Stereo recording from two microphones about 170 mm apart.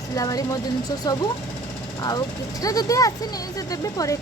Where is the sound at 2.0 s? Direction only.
20° left (ahead or behind).